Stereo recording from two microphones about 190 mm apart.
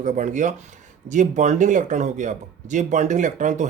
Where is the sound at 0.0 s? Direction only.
40° right (ahead or behind).